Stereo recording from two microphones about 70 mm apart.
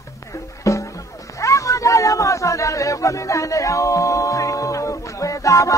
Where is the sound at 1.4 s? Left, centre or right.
Left.